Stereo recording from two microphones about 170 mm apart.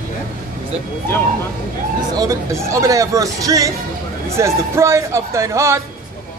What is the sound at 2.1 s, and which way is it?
Speech, 20° right (ahead or behind).